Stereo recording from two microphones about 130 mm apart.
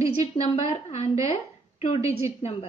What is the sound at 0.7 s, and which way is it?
Speech, 55° left (ahead or behind).